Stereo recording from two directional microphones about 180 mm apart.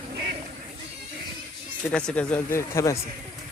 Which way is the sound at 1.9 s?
5° left (ahead or behind).